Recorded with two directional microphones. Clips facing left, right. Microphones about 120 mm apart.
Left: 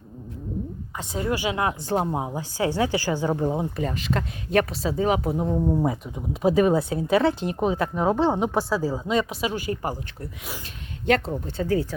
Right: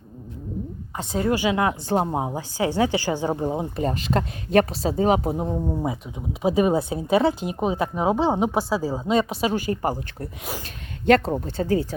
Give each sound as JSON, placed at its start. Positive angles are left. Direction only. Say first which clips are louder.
{"t": 0.9, "sound": "a woman's voice", "louder": "right 4 dB", "side_deg": -30}
{"t": 3.4, "sound": "speech", "louder": "even", "side_deg": -10}
{"t": 3.8, "sound": "speech", "louder": "right 3 dB", "side_deg": -35}
{"t": 5.5, "sound": "speech", "louder": "left 3 dB", "side_deg": 0}
{"t": 5.9, "sound": "a woman's voice", "louder": "left 1 dB", "side_deg": -10}
{"t": 10.2, "sound": "speech", "louder": "right 4 dB", "side_deg": -45}